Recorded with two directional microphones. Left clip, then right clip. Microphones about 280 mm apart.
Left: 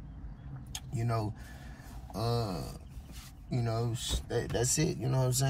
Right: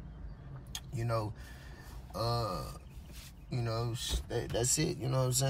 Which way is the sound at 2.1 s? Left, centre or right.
Right.